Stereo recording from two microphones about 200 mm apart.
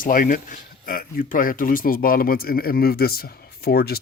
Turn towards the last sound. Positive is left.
turn(degrees=50)  # may be behind; listen again after turning